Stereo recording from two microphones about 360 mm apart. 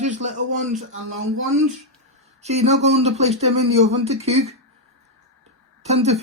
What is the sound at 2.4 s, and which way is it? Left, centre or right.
Speech, centre.